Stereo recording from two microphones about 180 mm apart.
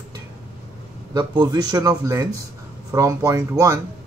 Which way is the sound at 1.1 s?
25° right (ahead or behind).